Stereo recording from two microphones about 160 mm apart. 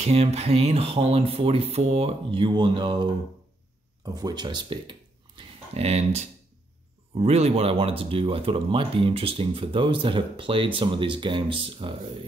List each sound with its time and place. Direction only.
0.0 s speech: 40° right (ahead or behind)